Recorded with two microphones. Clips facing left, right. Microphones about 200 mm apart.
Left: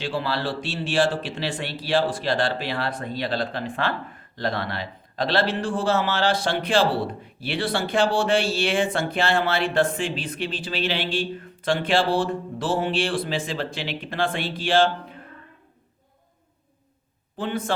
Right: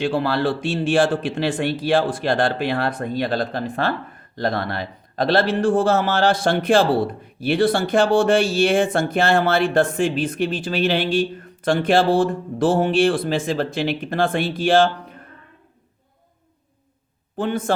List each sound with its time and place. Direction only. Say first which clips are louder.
0.0 s a man's voice: right 6 dB; 50° right (ahead or behind)
17.3 s a man's voice: right 5 dB; 45° right (ahead or behind)